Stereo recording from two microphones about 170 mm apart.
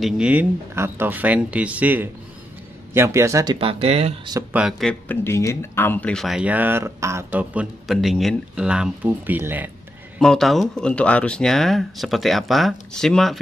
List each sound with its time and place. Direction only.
0.0 s speech: 5° right (ahead or behind)
3.5 s speech: 35° right (ahead or behind)
4.3 s speech: 20° right (ahead or behind)
4.6 s speech: centre (ahead or behind)
10.1 s speech: centre (ahead or behind)